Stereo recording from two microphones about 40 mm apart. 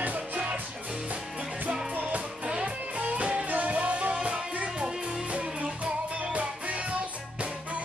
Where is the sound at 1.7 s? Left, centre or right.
Right.